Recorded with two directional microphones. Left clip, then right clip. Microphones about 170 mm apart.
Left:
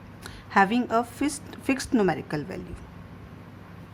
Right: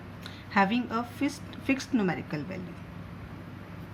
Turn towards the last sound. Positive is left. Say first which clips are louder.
# left 5 dB
turn(degrees=45)  # may be behind; listen again after turning